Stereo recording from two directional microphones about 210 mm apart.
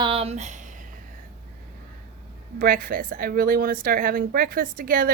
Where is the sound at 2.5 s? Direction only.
45° right (ahead or behind).